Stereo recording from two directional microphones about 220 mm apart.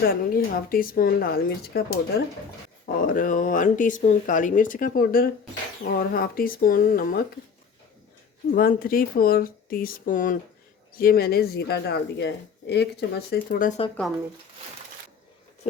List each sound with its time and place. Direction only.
0.0 s speech: 40° left (ahead or behind)
8.5 s speech: 40° left (ahead or behind)